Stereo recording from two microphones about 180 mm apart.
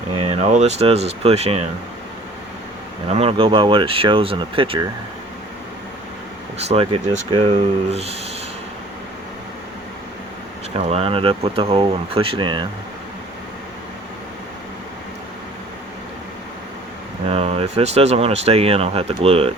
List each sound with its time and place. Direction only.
0.2 s speech: 40° right (ahead or behind)
3.1 s speech: 35° right (ahead or behind)
6.7 s speech: 30° right (ahead or behind)
10.8 s speech: 35° right (ahead or behind)
17.3 s speech: 35° right (ahead or behind)